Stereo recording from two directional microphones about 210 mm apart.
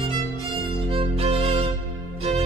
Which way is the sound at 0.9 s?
25° right (ahead or behind).